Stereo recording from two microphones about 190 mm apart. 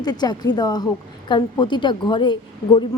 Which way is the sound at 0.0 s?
20° left (ahead or behind).